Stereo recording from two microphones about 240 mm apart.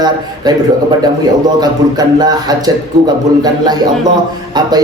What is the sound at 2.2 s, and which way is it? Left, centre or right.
A man's voice, centre.